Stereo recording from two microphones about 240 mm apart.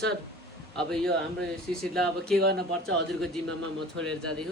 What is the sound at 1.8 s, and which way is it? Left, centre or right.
Speech, centre.